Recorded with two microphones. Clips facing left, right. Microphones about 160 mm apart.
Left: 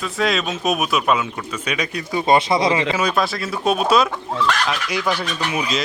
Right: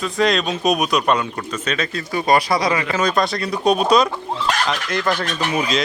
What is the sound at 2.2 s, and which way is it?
Speech, 25° left (ahead or behind).